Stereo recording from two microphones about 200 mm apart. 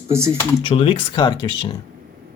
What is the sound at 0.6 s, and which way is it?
Speech, 25° left (ahead or behind).